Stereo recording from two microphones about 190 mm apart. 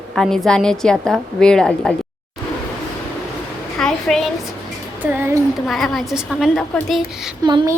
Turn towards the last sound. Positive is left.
turn(degrees=-20)  # may be behind; listen again after turning